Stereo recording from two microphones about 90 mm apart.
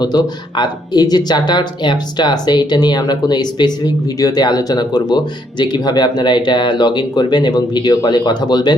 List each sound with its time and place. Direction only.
0.0 s speech: 50° left (ahead or behind)